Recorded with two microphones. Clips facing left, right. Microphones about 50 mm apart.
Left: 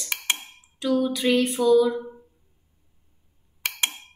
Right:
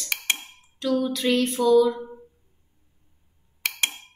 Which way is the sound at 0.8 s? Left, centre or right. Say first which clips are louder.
Left 1 dB; centre.